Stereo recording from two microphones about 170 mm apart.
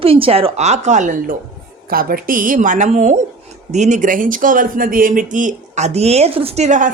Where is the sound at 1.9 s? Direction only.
60° right (ahead or behind).